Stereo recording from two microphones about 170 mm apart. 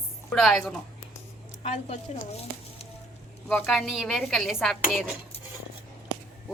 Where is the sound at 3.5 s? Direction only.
Centre (ahead or behind).